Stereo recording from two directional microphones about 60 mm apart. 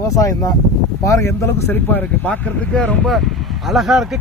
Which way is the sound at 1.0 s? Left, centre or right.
Left.